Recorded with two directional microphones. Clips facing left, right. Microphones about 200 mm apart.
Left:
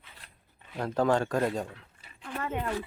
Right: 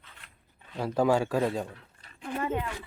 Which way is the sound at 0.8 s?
5° right (ahead or behind).